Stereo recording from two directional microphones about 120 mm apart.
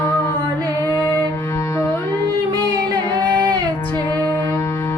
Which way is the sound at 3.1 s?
40° right (ahead or behind).